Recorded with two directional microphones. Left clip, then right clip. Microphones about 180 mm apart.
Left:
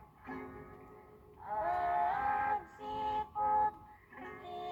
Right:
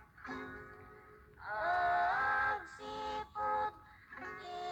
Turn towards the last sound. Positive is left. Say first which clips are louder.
# right 1 dB
turn(degrees=-25)  # may be behind; listen again after turning